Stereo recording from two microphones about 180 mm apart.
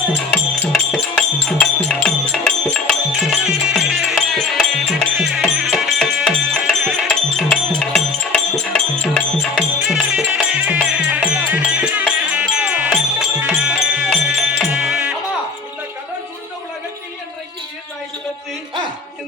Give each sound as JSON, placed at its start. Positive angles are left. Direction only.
{"t": 0.3, "sound": "music", "side_deg": 5}